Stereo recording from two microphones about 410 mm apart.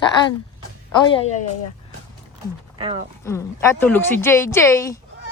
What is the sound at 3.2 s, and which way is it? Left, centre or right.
Speech, centre.